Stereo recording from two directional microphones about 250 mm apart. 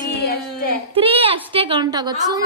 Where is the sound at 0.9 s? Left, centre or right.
Right.